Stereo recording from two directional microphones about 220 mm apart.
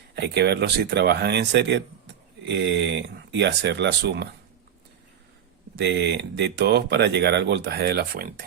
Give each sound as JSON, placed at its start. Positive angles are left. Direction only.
{"t": 0.2, "sound": "speech", "side_deg": -50}
{"t": 5.7, "sound": "speech", "side_deg": -50}